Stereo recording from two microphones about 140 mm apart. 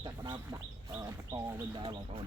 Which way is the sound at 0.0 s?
30° right (ahead or behind).